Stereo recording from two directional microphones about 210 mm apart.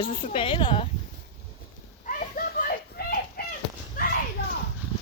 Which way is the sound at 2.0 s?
40° left (ahead or behind).